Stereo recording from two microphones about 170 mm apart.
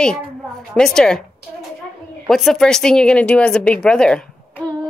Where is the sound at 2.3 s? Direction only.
Centre (ahead or behind).